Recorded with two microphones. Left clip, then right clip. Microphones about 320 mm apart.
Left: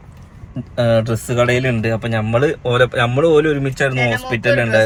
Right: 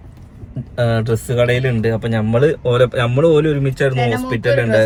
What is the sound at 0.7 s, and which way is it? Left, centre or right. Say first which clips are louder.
Speech: left 2 dB; centre.